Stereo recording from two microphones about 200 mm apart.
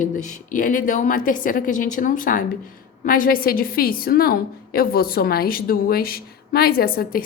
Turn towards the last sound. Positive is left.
turn(degrees=45)  # may be behind; listen again after turning